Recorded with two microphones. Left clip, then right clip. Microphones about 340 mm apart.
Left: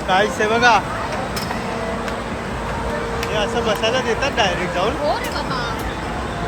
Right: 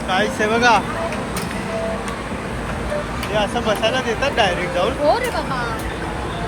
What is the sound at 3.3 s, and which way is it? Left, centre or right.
Speech, centre.